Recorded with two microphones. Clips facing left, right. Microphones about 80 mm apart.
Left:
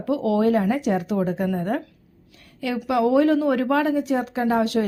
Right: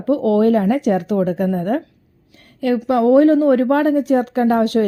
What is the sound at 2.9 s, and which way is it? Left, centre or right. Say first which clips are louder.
A woman's voice: right 6 dB; right.